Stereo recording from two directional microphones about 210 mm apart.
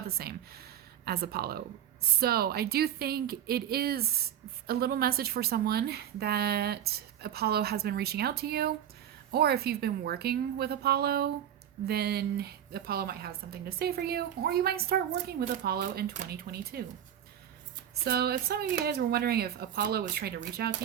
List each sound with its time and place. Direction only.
0.2 s a woman's voice: 45° right (ahead or behind)
18.0 s a woman's voice: 50° right (ahead or behind)